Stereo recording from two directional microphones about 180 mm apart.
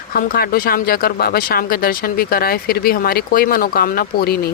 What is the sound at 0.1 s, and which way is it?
Speech, 55° left (ahead or behind).